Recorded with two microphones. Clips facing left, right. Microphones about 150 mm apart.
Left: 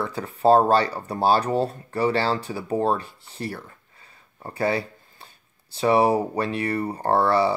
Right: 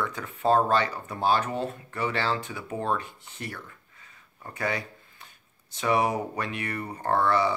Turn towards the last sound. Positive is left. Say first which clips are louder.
# left 4 dB
turn(degrees=35)  # may be behind; listen again after turning